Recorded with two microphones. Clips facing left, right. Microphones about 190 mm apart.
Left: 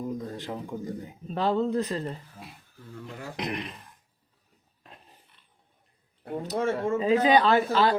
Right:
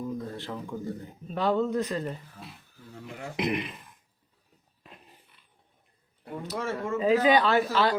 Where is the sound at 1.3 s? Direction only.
35° left (ahead or behind).